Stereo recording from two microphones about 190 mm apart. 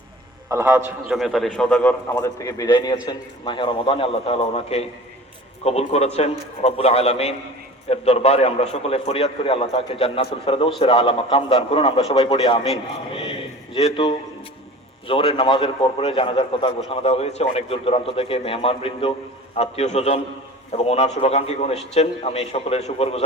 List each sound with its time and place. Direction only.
0.5 s a man's voice: 15° right (ahead or behind)
1.1 s a man's voice: centre (ahead or behind); by 12.7 s 30° left (ahead or behind)
13.8 s a man's voice: 25° left (ahead or behind)